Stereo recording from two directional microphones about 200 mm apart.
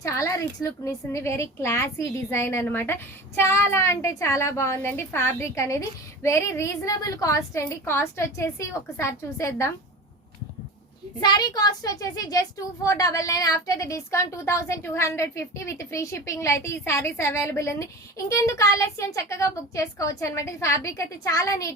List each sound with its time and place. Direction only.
0.0 s a woman's voice: 15° left (ahead or behind)
11.2 s a woman's voice: 20° left (ahead or behind)